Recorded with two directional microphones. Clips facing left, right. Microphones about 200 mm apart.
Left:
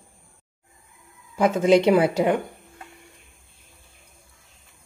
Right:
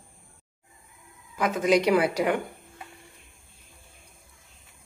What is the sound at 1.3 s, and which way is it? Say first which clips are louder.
Speech: left 5 dB; 30° left (ahead or behind).